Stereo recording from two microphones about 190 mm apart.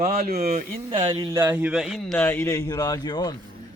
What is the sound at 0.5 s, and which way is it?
Speech, 25° right (ahead or behind).